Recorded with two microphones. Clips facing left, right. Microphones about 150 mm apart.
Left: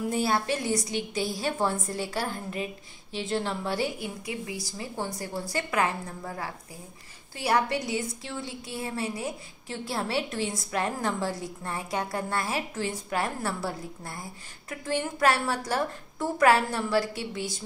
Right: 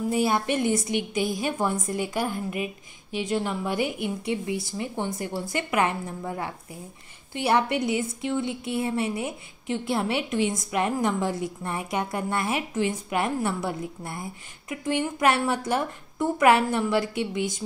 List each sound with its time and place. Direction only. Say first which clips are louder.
0.1 s a woman's voice: right 4 dB; 15° right (ahead or behind)
4.2 s a woman's voice: right 7 dB; 25° right (ahead or behind)